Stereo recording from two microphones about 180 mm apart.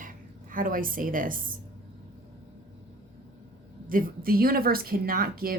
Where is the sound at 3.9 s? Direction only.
50° right (ahead or behind).